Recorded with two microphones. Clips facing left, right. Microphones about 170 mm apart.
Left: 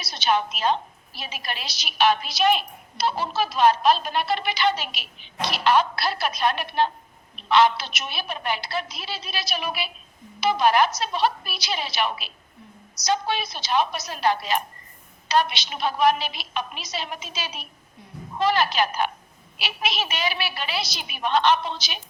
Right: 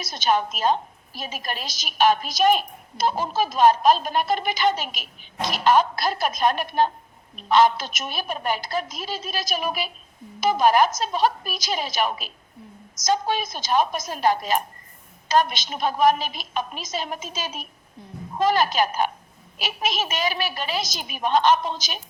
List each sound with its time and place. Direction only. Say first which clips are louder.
0.0 s a woman's voice: right 1 dB; 45° right (ahead or behind)